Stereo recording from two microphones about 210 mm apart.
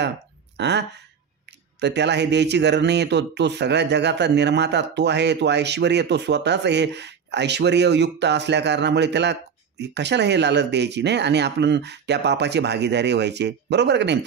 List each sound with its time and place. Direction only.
0.6 s speech: 55° right (ahead or behind)